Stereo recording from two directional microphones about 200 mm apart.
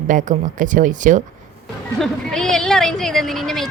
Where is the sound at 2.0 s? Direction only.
Centre (ahead or behind).